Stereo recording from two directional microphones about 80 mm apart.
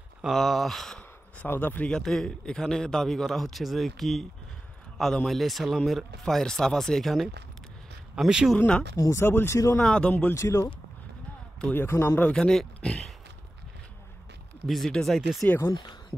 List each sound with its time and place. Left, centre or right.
0.2 s a man's voice: centre
1.4 s speech: left
1.9 s a man's voice: centre
8.5 s speech: centre
8.9 s speech: left
9.8 s speech: centre
10.3 s speech: left
11.7 s speech: left
12.2 s speech: centre
14.7 s a man's voice: centre
15.7 s speech: left